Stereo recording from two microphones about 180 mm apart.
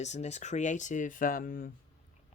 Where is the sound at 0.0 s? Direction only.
40° left (ahead or behind).